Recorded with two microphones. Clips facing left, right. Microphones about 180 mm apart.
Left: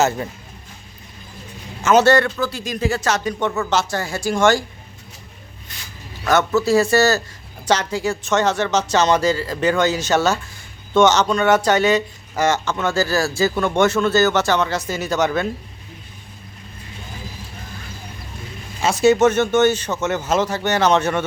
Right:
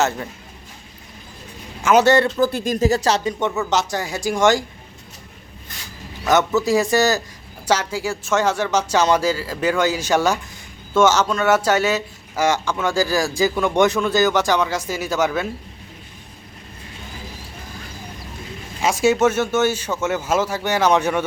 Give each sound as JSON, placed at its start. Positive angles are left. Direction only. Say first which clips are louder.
{"t": 1.8, "sound": "speech", "louder": "left 1 dB", "side_deg": -15}
{"t": 2.1, "sound": "speech", "louder": "right 1 dB", "side_deg": -30}
{"t": 2.4, "sound": "speech", "louder": "right 5 dB", "side_deg": -50}
{"t": 3.7, "sound": "speech", "louder": "even", "side_deg": -15}
{"t": 6.2, "sound": "speech", "louder": "even", "side_deg": -20}
{"t": 18.8, "sound": "speech", "louder": "left 2 dB", "side_deg": -10}